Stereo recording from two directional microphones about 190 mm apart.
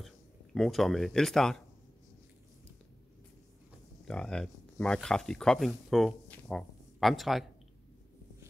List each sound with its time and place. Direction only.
0.6 s speech: centre (ahead or behind)
4.1 s speech: 5° left (ahead or behind)